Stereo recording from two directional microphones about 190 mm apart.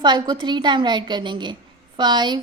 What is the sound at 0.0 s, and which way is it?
A woman's voice, 25° right (ahead or behind).